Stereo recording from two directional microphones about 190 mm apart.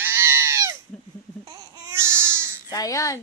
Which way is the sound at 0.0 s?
15° right (ahead or behind).